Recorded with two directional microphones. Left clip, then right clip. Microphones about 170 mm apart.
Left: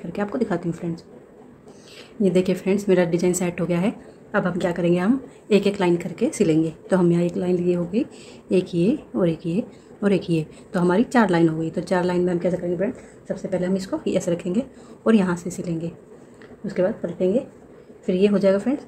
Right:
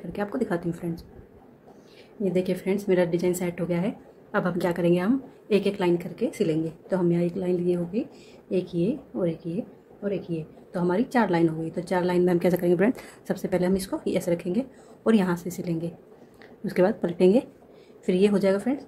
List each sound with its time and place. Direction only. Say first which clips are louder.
0.1 s a woman's voice: left 3 dB; 5° left (ahead or behind)
2.2 s a woman's voice: left 5 dB; 15° left (ahead or behind)
4.3 s a woman's voice: left 3 dB; centre (ahead or behind); by 9.7 s 20° left (ahead or behind)
10.0 s a woman's voice: left 8 dB; 35° left (ahead or behind)
10.7 s a woman's voice: left 5 dB; 15° left (ahead or behind)
12.3 s a woman's voice: right 1 dB; 20° right (ahead or behind)
13.6 s speech: even; 10° right (ahead or behind)
14.1 s a woman's voice: left 2 dB; 5° left (ahead or behind)
16.6 s a woman's voice: even; 20° right (ahead or behind)
18.0 s a woman's voice: left 3 dB; 10° right (ahead or behind)